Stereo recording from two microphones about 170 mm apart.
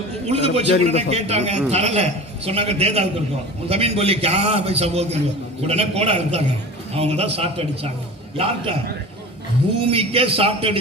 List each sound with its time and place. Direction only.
0.3 s a man's voice: 35° right (ahead or behind)
9.8 s a man's voice: 35° right (ahead or behind)